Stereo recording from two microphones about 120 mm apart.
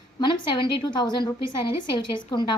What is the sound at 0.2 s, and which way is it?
A woman's voice, 40° left (ahead or behind).